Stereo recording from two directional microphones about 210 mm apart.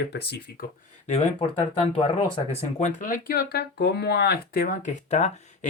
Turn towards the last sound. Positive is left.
turn(degrees=35)  # may be behind; listen again after turning